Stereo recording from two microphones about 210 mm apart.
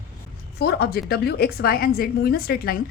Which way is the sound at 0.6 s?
50° left (ahead or behind).